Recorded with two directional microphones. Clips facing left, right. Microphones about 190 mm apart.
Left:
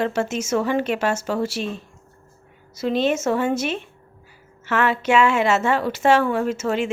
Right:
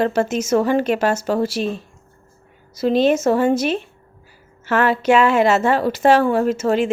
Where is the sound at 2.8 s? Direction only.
40° right (ahead or behind).